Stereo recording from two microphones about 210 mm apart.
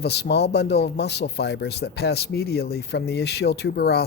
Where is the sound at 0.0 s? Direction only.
50° left (ahead or behind).